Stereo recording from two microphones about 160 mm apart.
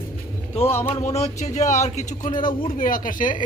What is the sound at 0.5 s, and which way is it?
Speech, 35° left (ahead or behind).